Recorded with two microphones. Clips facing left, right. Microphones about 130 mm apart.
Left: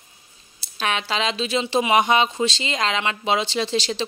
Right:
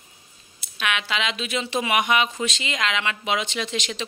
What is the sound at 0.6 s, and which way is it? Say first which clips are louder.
Speech: left 2 dB; 35° left (ahead or behind).